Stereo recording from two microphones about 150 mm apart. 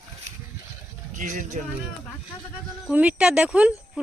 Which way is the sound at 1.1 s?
60° right (ahead or behind).